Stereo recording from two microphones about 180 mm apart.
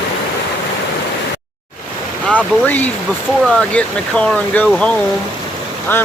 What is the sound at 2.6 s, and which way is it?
Speech, 10° left (ahead or behind).